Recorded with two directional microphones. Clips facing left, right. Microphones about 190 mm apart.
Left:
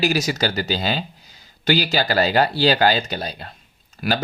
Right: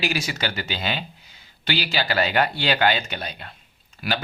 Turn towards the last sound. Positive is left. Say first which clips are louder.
# left 5 dB
turn(degrees=40)  # may be behind; listen again after turning